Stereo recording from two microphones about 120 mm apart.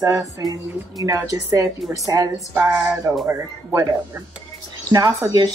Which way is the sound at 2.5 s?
15° right (ahead or behind).